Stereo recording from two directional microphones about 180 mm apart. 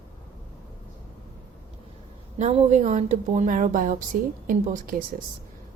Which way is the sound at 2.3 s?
40° right (ahead or behind).